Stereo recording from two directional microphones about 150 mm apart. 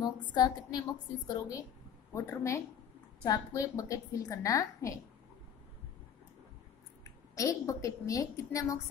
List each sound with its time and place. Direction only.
0.0 s a woman's voice: 25° left (ahead or behind)
7.3 s a woman's voice: 20° left (ahead or behind)